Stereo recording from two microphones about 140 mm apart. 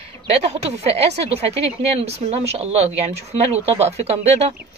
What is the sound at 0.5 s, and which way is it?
Speech, 45° right (ahead or behind).